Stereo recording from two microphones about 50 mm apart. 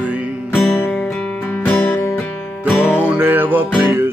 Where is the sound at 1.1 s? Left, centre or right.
Centre.